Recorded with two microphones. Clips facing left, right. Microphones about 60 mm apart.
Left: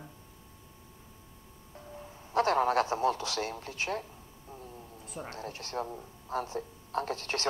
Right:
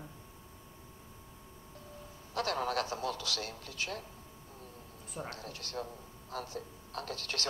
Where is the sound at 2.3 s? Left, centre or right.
Left.